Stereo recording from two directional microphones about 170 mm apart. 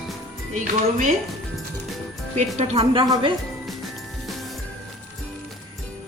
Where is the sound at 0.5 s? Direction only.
50° right (ahead or behind).